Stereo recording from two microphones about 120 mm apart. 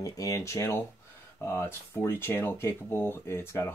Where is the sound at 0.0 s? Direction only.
25° left (ahead or behind).